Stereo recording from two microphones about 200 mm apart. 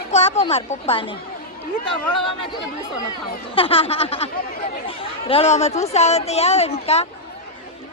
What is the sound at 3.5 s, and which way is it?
Speech, 25° left (ahead or behind).